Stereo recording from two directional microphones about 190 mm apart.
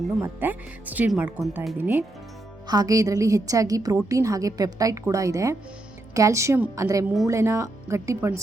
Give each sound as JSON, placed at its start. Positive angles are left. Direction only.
{"t": 0.2, "sound": "a woman's voice", "side_deg": -10}